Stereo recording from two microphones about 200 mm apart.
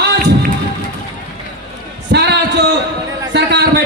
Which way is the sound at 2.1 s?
55° right (ahead or behind).